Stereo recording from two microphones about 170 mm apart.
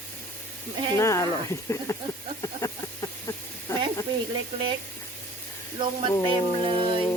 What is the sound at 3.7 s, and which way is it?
Sizzle, 15° left (ahead or behind).